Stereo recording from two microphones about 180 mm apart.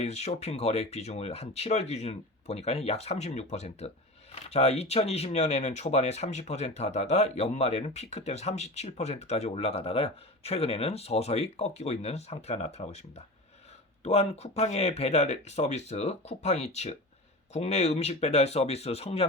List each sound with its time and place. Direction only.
0.0 s speech: 35° left (ahead or behind)